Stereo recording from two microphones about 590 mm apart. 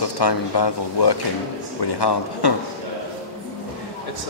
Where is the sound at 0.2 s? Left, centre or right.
Left.